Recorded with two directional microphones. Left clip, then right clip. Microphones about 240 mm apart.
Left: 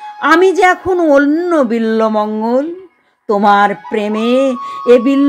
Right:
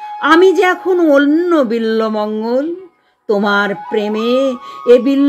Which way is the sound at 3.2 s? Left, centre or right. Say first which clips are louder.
Left 4 dB; centre.